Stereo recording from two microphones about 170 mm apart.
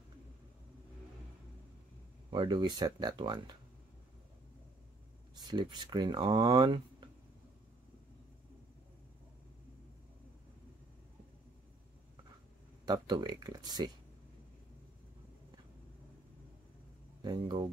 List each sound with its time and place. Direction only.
2.3 s speech: 25° right (ahead or behind)
5.3 s speech: 25° right (ahead or behind)
12.8 s speech: 25° right (ahead or behind)
17.2 s speech: 25° right (ahead or behind)